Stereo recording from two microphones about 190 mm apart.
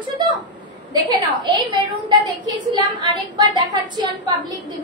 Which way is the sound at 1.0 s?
25° right (ahead or behind).